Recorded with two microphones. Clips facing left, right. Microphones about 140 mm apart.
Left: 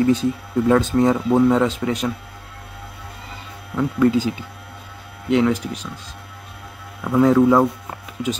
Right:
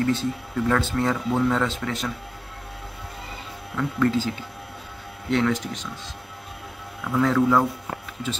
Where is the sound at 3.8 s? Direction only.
15° left (ahead or behind).